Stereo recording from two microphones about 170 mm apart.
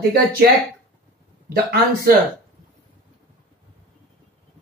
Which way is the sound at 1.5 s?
65° right (ahead or behind).